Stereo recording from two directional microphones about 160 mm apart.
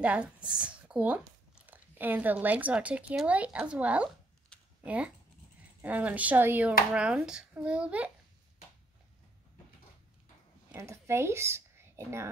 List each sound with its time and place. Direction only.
0.0 s speech: 10° right (ahead or behind)
10.8 s speech: 15° right (ahead or behind)